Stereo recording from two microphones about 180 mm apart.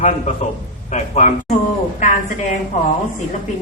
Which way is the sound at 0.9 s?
40° left (ahead or behind).